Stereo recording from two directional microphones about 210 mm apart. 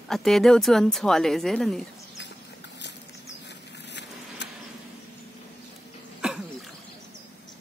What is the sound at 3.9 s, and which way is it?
Vehicle, 55° left (ahead or behind).